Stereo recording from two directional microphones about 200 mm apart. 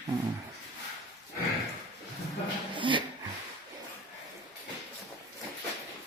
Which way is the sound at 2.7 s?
25° right (ahead or behind).